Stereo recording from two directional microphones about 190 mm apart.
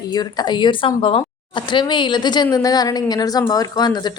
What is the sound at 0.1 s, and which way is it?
Speech, 20° left (ahead or behind).